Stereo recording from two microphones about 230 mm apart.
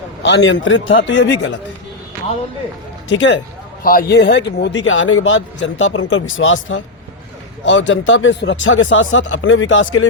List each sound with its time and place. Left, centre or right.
0.2 s speech: left
3.1 s speech: left
3.8 s speech: left